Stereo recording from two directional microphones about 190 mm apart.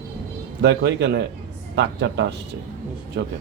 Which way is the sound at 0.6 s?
65° right (ahead or behind).